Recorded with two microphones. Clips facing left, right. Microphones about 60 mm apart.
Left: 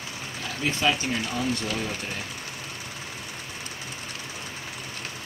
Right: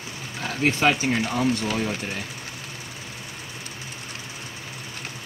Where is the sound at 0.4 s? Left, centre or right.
Right.